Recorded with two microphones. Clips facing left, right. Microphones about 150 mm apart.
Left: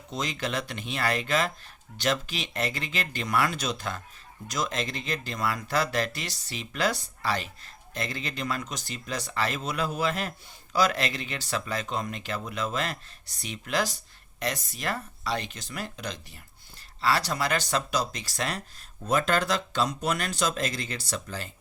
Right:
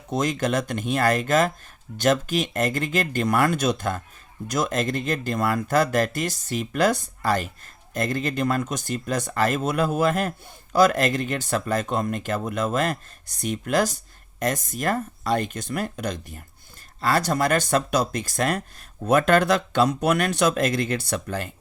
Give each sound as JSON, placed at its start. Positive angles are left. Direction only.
{"t": 0.1, "sound": "speech", "side_deg": -50}